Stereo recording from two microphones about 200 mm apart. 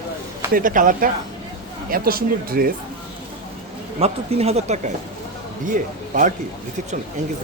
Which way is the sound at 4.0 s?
30° right (ahead or behind).